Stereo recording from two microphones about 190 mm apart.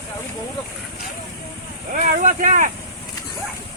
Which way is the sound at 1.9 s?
40° right (ahead or behind).